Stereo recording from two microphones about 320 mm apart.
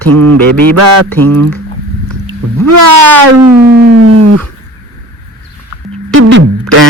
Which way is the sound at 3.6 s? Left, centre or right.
Right.